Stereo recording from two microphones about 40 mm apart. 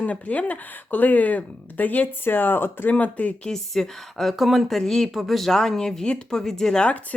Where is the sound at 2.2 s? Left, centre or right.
Left.